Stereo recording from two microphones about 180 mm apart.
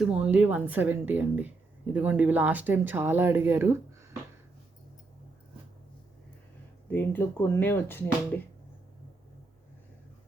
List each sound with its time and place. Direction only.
0.0 s a woman's voice: 5° right (ahead or behind)
6.9 s speech: 10° left (ahead or behind)